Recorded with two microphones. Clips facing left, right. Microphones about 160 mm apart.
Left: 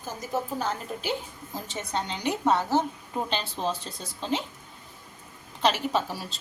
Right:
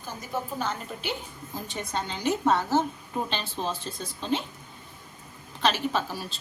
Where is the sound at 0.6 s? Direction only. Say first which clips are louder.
Left 1 dB; 35° left (ahead or behind).